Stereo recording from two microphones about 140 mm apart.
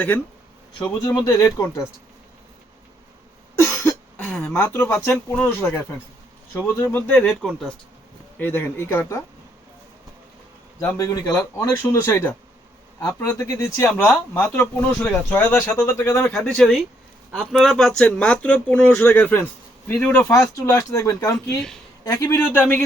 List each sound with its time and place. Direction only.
1.0 s speech: 20° left (ahead or behind)
3.6 s cough: 20° left (ahead or behind)
4.3 s speech: 10° left (ahead or behind)
7.3 s speech: centre (ahead or behind)
8.4 s speech: 15° left (ahead or behind)
10.8 s speech: 20° left (ahead or behind)
13.8 s speech: 5° left (ahead or behind)
21.3 s speech: 5° left (ahead or behind)
22.0 s speech: 20° left (ahead or behind)